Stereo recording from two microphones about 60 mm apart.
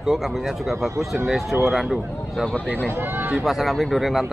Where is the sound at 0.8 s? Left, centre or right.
Right.